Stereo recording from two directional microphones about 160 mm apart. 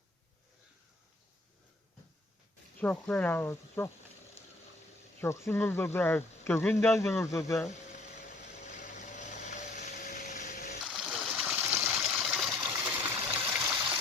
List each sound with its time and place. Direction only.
2.7 s speech: 10° left (ahead or behind)
5.2 s speech: 15° left (ahead or behind)
7.7 s vehicle: 45° left (ahead or behind)
10.8 s water: 5° right (ahead or behind)
12.7 s a sound: 10° right (ahead or behind)